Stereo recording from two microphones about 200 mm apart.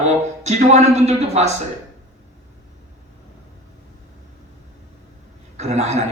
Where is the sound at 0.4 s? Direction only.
35° right (ahead or behind).